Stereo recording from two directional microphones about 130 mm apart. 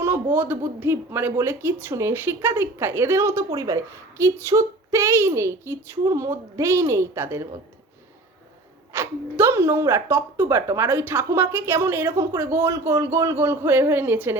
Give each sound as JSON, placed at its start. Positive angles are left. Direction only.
{"t": 0.0, "sound": "speech", "side_deg": -20}
{"t": 8.9, "sound": "speech", "side_deg": -20}